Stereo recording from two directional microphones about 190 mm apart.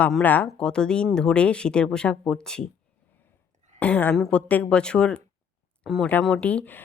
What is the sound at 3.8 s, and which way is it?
A woman's voice, 10° left (ahead or behind).